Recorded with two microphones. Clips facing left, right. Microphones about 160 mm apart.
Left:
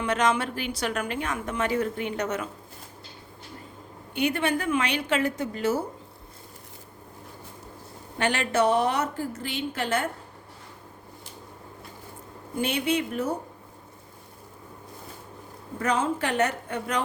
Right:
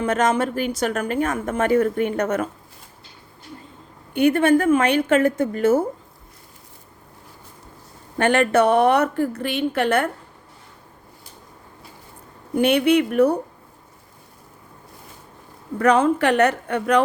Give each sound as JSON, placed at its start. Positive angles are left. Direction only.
{"t": 0.0, "sound": "speech", "side_deg": -45}
{"t": 4.1, "sound": "speech", "side_deg": -50}
{"t": 8.2, "sound": "a woman's voice", "side_deg": -55}
{"t": 12.5, "sound": "speech", "side_deg": -65}
{"t": 15.8, "sound": "speech", "side_deg": -65}